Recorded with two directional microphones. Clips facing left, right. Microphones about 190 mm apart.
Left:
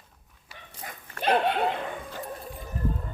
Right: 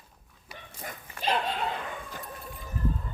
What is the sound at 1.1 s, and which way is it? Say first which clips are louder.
Dog: left 6 dB; 60° left (ahead or behind).